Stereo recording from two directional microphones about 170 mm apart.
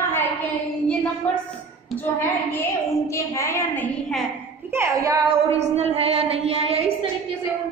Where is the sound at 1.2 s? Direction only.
10° left (ahead or behind).